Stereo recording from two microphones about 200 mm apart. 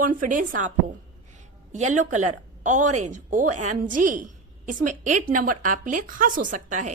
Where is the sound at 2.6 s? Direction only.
35° right (ahead or behind).